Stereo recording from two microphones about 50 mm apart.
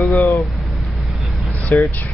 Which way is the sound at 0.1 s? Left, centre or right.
Left.